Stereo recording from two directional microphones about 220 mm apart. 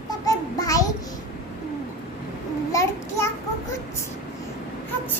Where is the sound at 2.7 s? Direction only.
15° left (ahead or behind).